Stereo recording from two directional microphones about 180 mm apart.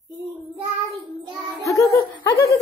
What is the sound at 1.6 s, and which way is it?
Laughter, 15° left (ahead or behind).